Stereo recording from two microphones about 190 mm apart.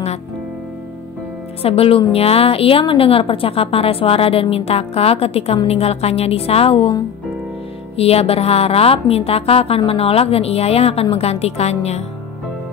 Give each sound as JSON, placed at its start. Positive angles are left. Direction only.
{"t": 1.6, "sound": "a woman's voice", "side_deg": 30}